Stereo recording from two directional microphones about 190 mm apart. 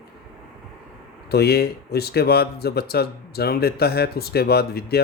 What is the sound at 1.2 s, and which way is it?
Speech, 55° left (ahead or behind).